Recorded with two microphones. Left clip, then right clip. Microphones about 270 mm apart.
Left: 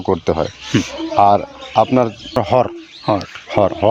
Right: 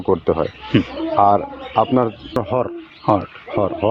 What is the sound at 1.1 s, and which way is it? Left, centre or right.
Speech, left.